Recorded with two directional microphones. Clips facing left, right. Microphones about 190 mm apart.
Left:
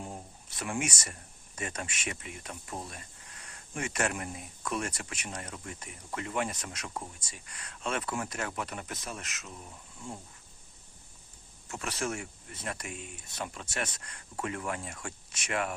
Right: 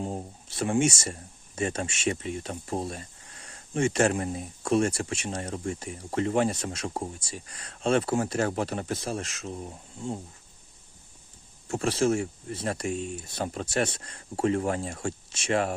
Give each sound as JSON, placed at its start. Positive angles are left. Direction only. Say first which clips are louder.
{"t": 0.0, "sound": "speech", "louder": "right 9 dB", "side_deg": -30}
{"t": 11.7, "sound": "speech", "louder": "right 11 dB", "side_deg": -30}